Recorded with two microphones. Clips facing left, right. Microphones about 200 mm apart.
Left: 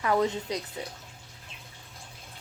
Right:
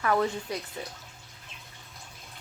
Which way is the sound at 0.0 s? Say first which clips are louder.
Left 1 dB; 20° left (ahead or behind).